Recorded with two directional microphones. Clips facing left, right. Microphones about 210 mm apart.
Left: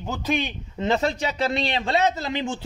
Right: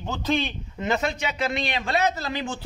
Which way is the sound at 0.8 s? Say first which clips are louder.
Left 3 dB; 30° left (ahead or behind).